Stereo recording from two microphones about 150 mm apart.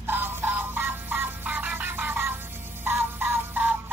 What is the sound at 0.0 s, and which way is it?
Music, 15° right (ahead or behind).